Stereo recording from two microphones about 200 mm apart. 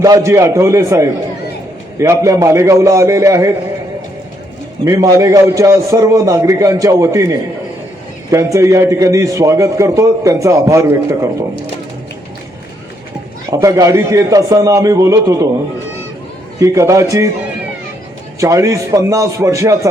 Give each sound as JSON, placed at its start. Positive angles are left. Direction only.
{"t": 0.0, "sound": "a man's voice", "side_deg": -15}
{"t": 4.9, "sound": "a man's voice", "side_deg": -15}
{"t": 13.5, "sound": "a man's voice", "side_deg": -15}
{"t": 16.6, "sound": "a man's voice", "side_deg": -15}
{"t": 18.3, "sound": "a man's voice", "side_deg": -15}